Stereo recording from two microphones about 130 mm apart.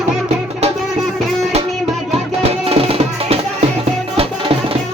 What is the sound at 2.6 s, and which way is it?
Music, 45° right (ahead or behind).